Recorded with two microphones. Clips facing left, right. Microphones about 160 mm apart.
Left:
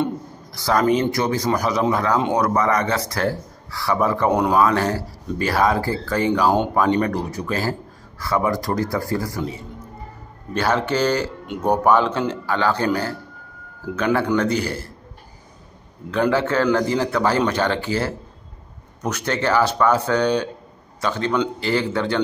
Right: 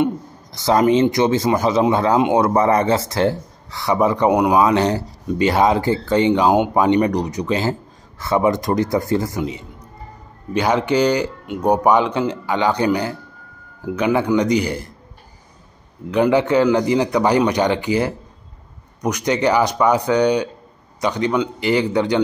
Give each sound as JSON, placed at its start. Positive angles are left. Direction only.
{"t": 0.0, "sound": "a man's voice", "side_deg": -20}
{"t": 16.1, "sound": "speech", "side_deg": -15}